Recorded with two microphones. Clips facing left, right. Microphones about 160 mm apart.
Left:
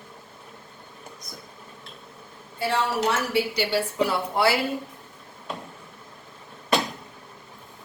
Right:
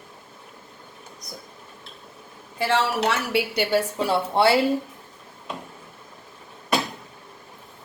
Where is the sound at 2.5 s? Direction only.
75° right (ahead or behind).